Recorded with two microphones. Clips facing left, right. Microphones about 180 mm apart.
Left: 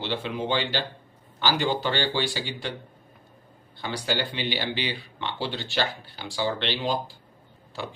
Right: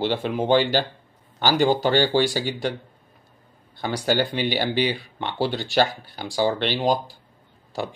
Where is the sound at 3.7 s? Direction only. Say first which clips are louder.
Right 6 dB; 45° right (ahead or behind).